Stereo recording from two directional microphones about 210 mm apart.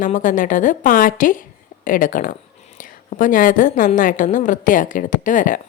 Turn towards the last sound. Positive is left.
turn(degrees=40)  # may be behind; listen again after turning